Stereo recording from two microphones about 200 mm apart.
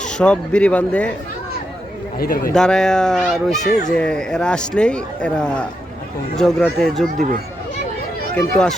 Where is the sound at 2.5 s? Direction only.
5° left (ahead or behind).